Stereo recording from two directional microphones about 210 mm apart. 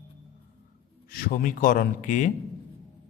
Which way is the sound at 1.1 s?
45° left (ahead or behind).